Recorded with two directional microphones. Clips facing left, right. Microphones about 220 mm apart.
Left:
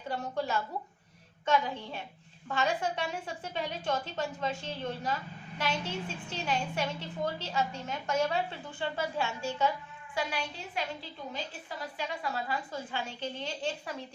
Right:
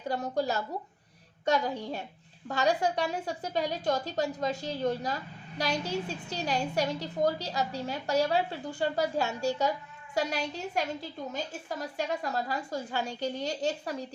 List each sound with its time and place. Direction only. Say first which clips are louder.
0.1 s a woman's voice: right 3 dB; 40° right (ahead or behind)